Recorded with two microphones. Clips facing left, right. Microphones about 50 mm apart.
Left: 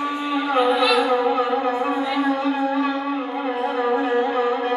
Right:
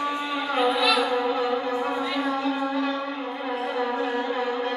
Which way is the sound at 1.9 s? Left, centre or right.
Centre.